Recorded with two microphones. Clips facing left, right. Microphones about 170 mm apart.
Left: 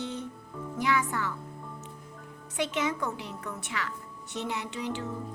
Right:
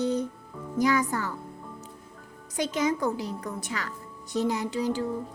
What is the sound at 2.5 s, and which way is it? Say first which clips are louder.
A woman's voice: right 3 dB; 40° right (ahead or behind).